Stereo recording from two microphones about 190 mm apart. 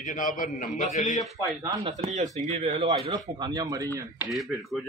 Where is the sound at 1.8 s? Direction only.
35° right (ahead or behind).